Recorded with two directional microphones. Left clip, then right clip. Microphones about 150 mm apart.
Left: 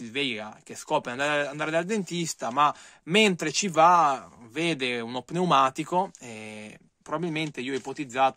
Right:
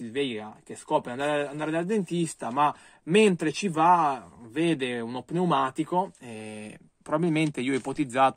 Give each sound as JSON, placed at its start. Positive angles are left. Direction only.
{"t": 0.1, "sound": "speech", "side_deg": 35}
{"t": 6.2, "sound": "speech", "side_deg": 15}
{"t": 7.1, "sound": "speech", "side_deg": 0}